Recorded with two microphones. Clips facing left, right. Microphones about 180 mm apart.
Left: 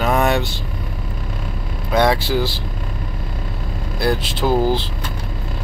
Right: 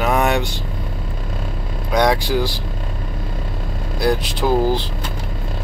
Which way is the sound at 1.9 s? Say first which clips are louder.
Even; 15° right (ahead or behind).